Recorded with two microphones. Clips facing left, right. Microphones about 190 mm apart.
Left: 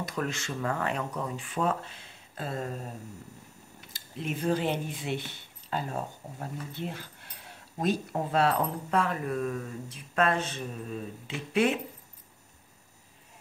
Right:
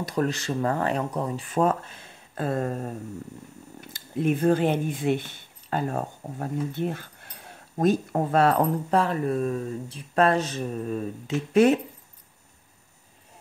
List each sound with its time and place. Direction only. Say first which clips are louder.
0.0 s speech: right 7 dB; 35° right (ahead or behind); by 2.9 s 55° right (ahead or behind)
3.9 s speech: right 10 dB; 50° right (ahead or behind)
8.9 s speech: right 4 dB; 35° right (ahead or behind)